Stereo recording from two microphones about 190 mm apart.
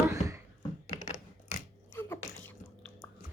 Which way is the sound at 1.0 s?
35° left (ahead or behind).